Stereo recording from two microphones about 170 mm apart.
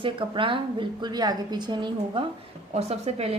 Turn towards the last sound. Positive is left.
turn(degrees=-40)  # may be behind; listen again after turning